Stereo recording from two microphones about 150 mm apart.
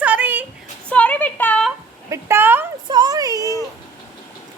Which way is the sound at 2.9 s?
25° right (ahead or behind).